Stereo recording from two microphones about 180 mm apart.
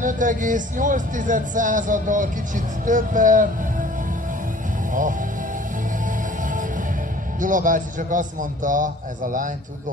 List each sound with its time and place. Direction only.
0.0 s speech: 45° right (ahead or behind)
7.3 s speech: 45° right (ahead or behind)